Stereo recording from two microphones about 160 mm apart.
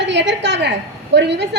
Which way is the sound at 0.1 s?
90° right.